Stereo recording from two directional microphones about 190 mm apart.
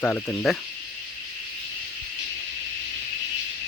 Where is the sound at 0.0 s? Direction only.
10° left (ahead or behind).